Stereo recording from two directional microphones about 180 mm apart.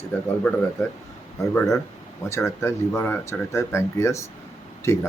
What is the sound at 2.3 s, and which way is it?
Speech, 15° left (ahead or behind).